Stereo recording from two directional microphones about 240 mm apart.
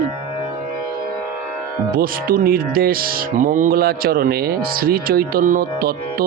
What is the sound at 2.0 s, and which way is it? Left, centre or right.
Speech, right.